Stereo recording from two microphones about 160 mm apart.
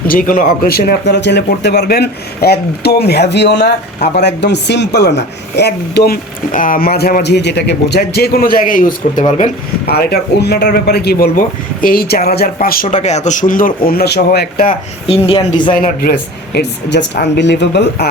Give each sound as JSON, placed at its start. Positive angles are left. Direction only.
{"t": 0.1, "sound": "speech", "side_deg": 60}
{"t": 6.5, "sound": "a man's voice", "side_deg": 55}
{"t": 9.9, "sound": "speech", "side_deg": 75}
{"t": 13.0, "sound": "a man's voice", "side_deg": 45}
{"t": 15.0, "sound": "a woman's voice", "side_deg": 35}
{"t": 15.7, "sound": "speech", "side_deg": 65}
{"t": 16.6, "sound": "speech", "side_deg": 90}